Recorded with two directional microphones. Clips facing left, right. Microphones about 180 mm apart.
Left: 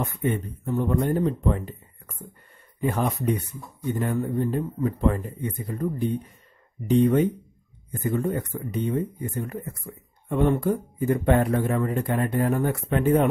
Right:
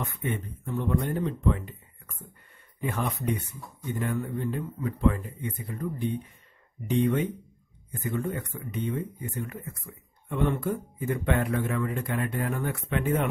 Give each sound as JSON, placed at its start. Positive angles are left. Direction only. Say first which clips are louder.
{"t": 0.0, "sound": "a man's voice", "louder": "left 6 dB", "side_deg": 40}
{"t": 2.8, "sound": "a man's voice", "louder": "left 5 dB", "side_deg": 40}